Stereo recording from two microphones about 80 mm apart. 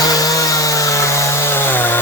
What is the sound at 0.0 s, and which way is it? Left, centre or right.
Chainsaw, left.